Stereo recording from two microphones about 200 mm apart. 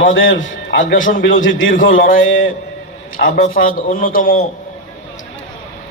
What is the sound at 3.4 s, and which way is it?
A man's voice, 45° left (ahead or behind).